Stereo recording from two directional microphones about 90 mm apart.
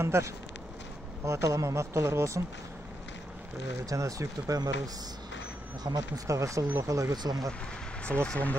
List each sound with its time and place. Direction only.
0.0 s speech: 30° right (ahead or behind)
3.9 s speech: 35° right (ahead or behind)
5.9 s speech: 45° right (ahead or behind)
8.0 s speech: 15° left (ahead or behind)